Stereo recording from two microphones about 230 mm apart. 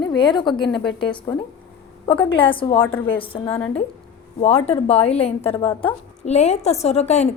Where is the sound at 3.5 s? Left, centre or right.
Centre.